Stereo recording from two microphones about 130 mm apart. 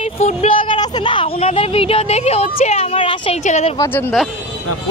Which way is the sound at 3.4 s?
60° left (ahead or behind).